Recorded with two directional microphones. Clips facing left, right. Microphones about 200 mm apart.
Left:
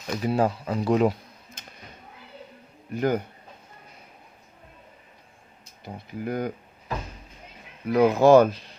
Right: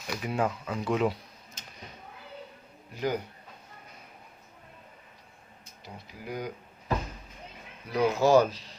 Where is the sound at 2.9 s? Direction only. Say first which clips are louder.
Left 6 dB; 55° left (ahead or behind).